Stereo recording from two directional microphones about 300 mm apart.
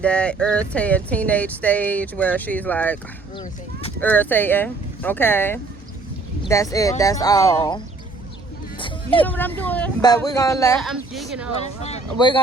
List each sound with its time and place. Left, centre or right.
0.0 s speech: centre
4.0 s speech: centre
9.2 s speech: centre
11.6 s speech: left